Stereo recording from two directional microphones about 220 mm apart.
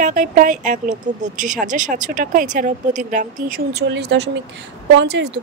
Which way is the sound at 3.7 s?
50° right (ahead or behind).